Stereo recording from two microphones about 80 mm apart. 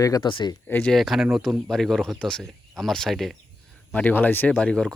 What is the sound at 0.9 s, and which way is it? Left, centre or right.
Speech, centre.